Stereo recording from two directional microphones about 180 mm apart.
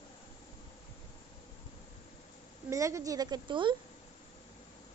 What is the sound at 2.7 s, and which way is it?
A woman's voice, 15° right (ahead or behind).